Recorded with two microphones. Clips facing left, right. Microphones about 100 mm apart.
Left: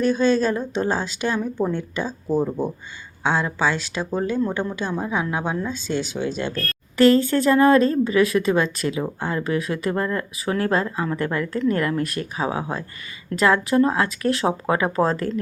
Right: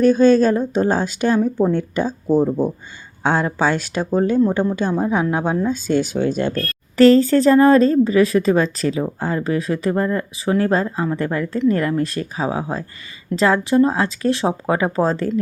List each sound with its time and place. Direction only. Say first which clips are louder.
0.0 s speech: right 6 dB; 45° right (ahead or behind)
2.4 s speech: right 5 dB; 15° right (ahead or behind)
3.2 s a woman's voice: right 3 dB; 45° right (ahead or behind); by 15.3 s 30° right (ahead or behind)